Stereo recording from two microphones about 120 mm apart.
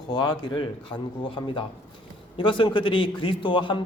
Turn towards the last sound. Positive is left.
turn(degrees=40)  # may be behind; listen again after turning